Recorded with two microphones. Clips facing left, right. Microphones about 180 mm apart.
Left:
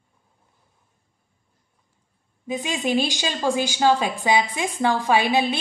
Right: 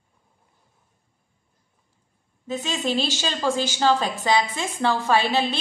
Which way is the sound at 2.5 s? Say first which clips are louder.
Left 2 dB; 15° left (ahead or behind).